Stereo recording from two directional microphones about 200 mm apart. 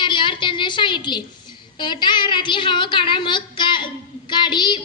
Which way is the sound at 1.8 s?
20° left (ahead or behind).